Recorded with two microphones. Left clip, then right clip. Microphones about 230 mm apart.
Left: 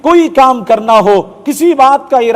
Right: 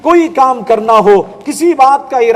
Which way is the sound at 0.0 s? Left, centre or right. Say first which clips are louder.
Left 2 dB; left.